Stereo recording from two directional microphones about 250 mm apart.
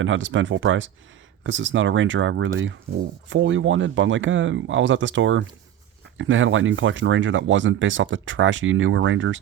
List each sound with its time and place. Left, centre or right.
0.0 s speech: right